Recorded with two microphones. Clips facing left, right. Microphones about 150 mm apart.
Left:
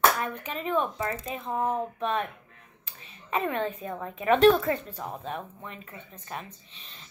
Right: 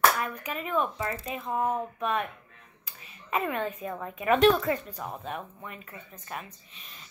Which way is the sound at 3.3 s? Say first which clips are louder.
Left 1 dB; 30° left (ahead or behind).